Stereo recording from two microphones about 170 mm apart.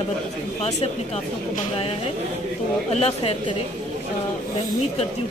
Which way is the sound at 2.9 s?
35° left (ahead or behind).